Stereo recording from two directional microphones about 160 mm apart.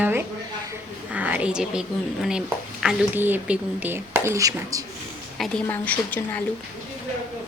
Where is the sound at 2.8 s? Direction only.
10° right (ahead or behind).